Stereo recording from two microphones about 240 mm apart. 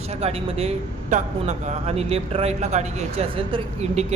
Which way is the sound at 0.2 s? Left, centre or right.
Right.